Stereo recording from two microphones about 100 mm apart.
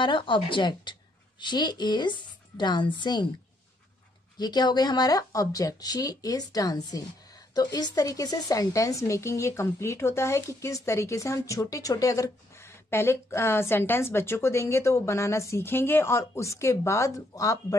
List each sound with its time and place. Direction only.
0.0 s a woman's voice: 50° left (ahead or behind)
4.4 s speech: 45° left (ahead or behind)